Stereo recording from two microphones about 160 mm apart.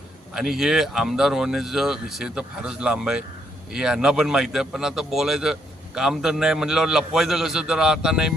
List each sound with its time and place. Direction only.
0.3 s a man's voice: 5° right (ahead or behind)